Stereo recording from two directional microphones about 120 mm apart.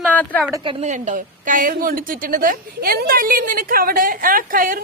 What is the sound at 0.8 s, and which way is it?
Speech, 90° right.